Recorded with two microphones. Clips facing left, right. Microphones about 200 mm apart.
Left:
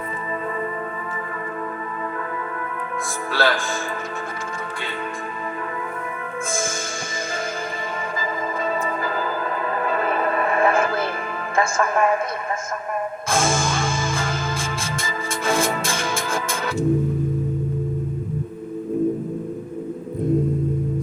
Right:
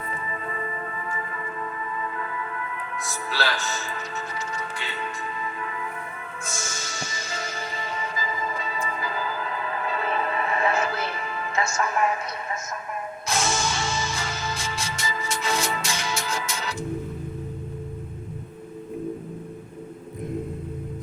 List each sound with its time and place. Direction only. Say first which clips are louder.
3.3 s speech: left 7 dB; 50° left (ahead or behind)
6.5 s speech: left 10 dB; 50° left (ahead or behind)
8.2 s music: left 8 dB; 55° left (ahead or behind)
11.5 s speech: left 6 dB; 50° left (ahead or behind)
13.2 s music: left 4 dB; 50° left (ahead or behind)